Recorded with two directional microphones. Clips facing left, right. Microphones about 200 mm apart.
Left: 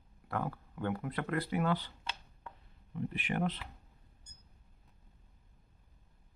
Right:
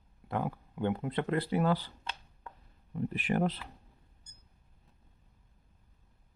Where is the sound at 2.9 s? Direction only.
40° right (ahead or behind).